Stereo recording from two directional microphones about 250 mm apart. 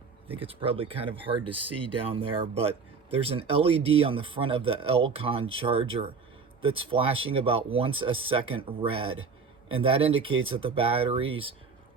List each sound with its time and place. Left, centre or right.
0.3 s speech: right
1.5 s speech: right
3.2 s speech: right